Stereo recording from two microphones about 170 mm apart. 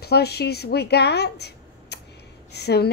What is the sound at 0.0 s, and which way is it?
A woman's voice, 70° left (ahead or behind).